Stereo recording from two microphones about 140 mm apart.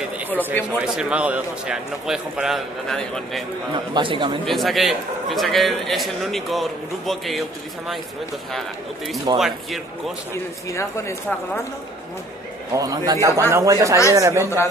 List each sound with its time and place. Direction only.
0.3 s a man's voice: 15° left (ahead or behind)
0.8 s a man's voice: 5° right (ahead or behind)
3.7 s speech: 35° right (ahead or behind)
4.5 s a man's voice: centre (ahead or behind)
8.5 s a man's voice: centre (ahead or behind)
10.7 s speech: 20° left (ahead or behind)
12.7 s a man's voice: 25° right (ahead or behind)